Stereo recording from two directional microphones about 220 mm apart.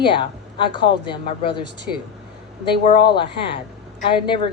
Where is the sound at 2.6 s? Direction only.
20° left (ahead or behind).